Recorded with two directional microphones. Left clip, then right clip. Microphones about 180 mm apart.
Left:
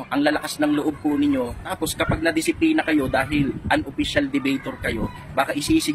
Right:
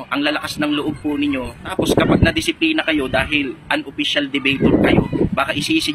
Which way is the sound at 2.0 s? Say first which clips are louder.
Right 3 dB; 15° left (ahead or behind).